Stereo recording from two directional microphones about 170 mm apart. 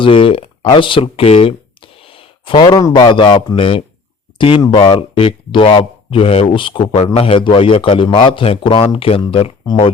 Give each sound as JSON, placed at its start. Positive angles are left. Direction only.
{"t": 0.0, "sound": "speech", "side_deg": 30}